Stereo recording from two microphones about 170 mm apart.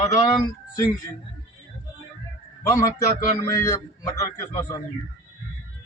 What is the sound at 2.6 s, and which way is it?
A man's voice, 20° left (ahead or behind).